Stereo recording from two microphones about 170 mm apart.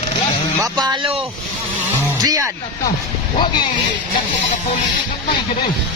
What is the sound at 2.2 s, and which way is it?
Speech, 20° right (ahead or behind).